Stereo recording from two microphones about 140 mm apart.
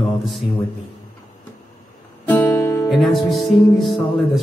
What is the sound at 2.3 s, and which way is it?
Music, 10° left (ahead or behind).